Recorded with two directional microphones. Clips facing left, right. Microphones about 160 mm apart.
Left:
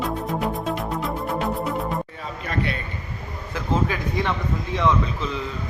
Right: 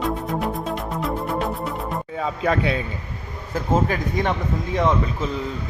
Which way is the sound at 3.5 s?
45° right (ahead or behind).